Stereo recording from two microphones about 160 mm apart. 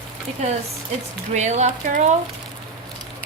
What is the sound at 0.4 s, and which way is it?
Speech, 45° right (ahead or behind).